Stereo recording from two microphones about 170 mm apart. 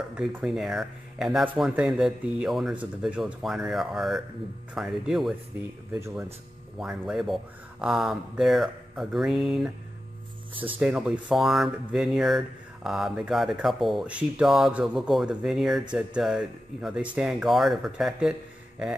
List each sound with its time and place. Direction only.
0.1 s speech: 5° right (ahead or behind)
5.9 s speech: 15° right (ahead or behind)
6.8 s speech: 5° right (ahead or behind)
10.5 s speech: 30° right (ahead or behind)
10.8 s speech: 5° right (ahead or behind)